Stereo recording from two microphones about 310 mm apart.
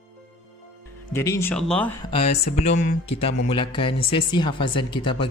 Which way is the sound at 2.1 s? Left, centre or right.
Centre.